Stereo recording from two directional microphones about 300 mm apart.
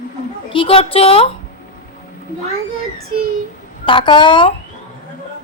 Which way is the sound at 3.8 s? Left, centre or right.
Centre.